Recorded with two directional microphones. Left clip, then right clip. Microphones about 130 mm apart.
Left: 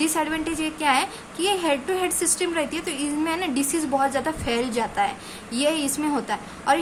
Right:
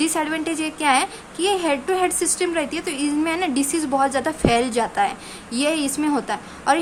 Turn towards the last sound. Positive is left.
turn(degrees=-35)  # may be behind; listen again after turning